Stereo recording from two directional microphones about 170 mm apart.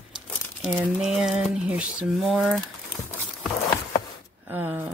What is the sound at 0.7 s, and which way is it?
Speech, 5° right (ahead or behind).